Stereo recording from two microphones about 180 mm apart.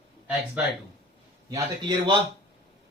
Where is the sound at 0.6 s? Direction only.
5° right (ahead or behind).